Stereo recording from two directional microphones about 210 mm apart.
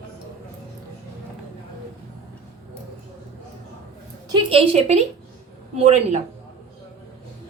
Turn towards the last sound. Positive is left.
turn(degrees=-30)  # may be behind; listen again after turning